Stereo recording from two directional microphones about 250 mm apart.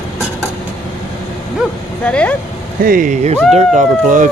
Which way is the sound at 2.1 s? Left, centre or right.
Centre.